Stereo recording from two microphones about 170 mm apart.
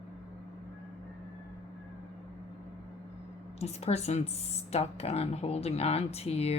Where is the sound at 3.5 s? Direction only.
40° left (ahead or behind).